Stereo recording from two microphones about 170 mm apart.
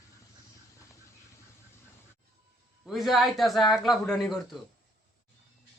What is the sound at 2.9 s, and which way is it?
Speech, centre (ahead or behind).